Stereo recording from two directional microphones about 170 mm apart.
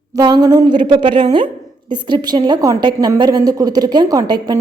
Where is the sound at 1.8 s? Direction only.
25° right (ahead or behind).